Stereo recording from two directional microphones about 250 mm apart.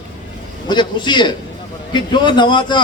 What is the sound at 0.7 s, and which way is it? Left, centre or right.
A man's voice, centre.